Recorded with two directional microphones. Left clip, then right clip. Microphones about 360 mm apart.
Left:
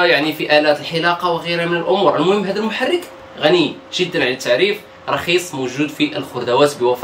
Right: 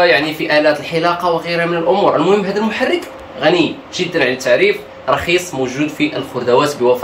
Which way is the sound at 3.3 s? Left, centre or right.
Centre.